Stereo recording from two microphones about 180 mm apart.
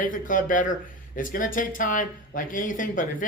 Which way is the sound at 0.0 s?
45° left (ahead or behind).